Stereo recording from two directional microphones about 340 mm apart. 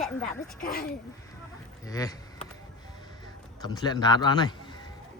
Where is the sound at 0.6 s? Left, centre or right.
Left.